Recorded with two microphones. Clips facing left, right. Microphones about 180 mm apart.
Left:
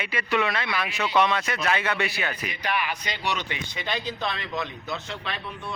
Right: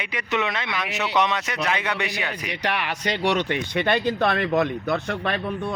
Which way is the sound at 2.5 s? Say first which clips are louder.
Right 4 dB; 80° right.